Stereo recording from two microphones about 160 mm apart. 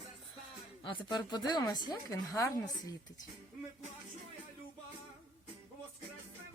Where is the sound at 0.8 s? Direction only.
30° left (ahead or behind).